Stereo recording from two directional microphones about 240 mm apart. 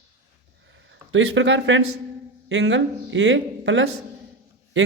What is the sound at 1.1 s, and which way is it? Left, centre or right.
A man's voice, right.